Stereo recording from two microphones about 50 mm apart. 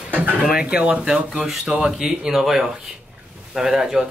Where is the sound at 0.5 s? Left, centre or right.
Centre.